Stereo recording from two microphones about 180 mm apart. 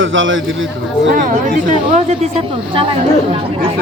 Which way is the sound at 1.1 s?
45° right (ahead or behind).